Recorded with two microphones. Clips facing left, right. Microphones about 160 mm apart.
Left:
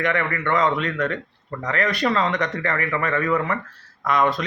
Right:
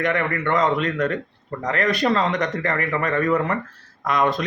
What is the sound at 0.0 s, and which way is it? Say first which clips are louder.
A man's voice: right 1 dB; 40° right (ahead or behind).